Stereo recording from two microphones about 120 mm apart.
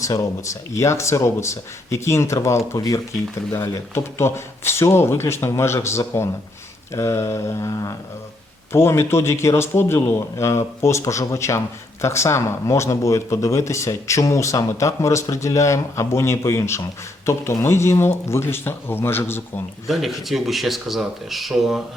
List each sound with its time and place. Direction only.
0.0 s speech: 25° left (ahead or behind)
19.9 s speech: centre (ahead or behind)